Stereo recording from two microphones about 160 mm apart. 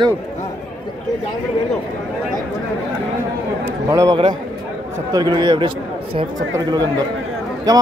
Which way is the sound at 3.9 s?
20° right (ahead or behind).